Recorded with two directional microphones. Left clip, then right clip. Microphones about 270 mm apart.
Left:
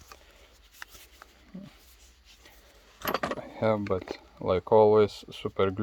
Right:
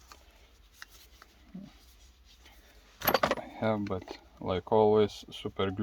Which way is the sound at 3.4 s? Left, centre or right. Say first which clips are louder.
Left 4 dB; left.